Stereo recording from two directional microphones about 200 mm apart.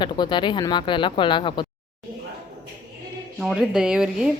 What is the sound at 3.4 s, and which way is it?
Speech, 5° right (ahead or behind).